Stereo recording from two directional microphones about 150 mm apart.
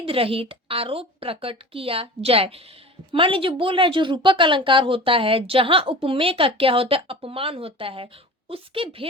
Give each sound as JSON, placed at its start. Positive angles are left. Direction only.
{"t": 0.0, "sound": "a woman's voice", "side_deg": -40}